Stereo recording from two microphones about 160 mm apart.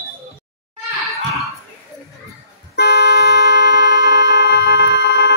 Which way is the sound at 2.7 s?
90° left.